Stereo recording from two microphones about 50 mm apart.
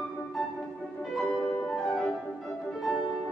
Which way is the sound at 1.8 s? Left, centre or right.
Centre.